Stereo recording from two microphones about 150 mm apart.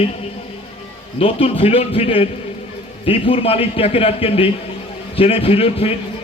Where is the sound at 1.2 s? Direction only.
40° left (ahead or behind).